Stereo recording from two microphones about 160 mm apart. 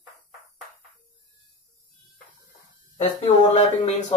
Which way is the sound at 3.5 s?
45° left (ahead or behind).